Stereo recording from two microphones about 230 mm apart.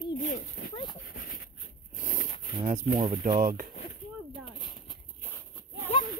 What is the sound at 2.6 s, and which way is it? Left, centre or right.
Speech, right.